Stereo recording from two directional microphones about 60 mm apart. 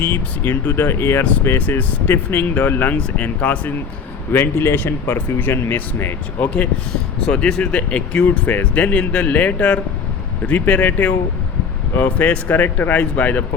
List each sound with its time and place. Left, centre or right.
0.0 s speech: left
1.5 s speech: left
4.3 s speech: left
7.3 s speech: centre